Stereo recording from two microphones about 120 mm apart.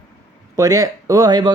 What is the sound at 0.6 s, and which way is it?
Speech, 30° right (ahead or behind).